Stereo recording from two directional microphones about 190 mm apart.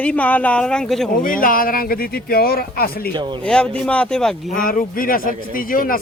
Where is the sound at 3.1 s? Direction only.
25° right (ahead or behind).